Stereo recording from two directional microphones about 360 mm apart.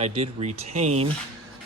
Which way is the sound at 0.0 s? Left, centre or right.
Centre.